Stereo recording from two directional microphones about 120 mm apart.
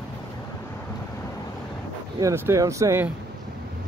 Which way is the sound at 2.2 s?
25° right (ahead or behind).